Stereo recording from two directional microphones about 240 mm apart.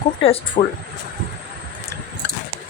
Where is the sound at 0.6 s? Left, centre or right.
Left.